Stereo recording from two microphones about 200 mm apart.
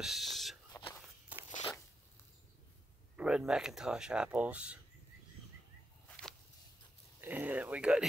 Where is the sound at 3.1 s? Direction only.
5° right (ahead or behind).